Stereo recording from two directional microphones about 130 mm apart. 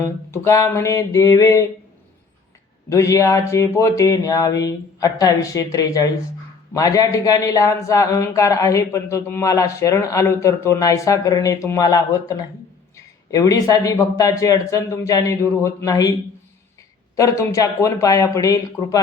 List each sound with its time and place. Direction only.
0.0 s speech: 20° left (ahead or behind)
2.9 s speech: 25° left (ahead or behind)
13.3 s speech: 25° left (ahead or behind)
17.2 s speech: 25° left (ahead or behind)